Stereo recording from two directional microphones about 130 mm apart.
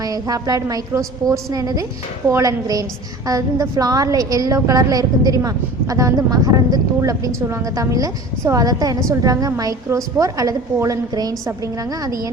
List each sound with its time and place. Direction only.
0.0 s a woman's voice: 30° right (ahead or behind)